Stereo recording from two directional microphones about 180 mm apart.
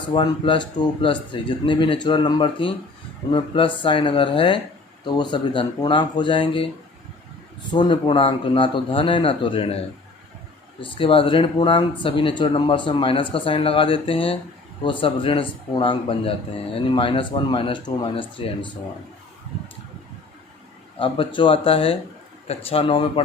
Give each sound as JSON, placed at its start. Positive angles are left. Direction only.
{"t": 0.1, "sound": "a man's voice", "side_deg": 30}
{"t": 7.7, "sound": "a man's voice", "side_deg": 25}
{"t": 21.0, "sound": "a man's voice", "side_deg": 30}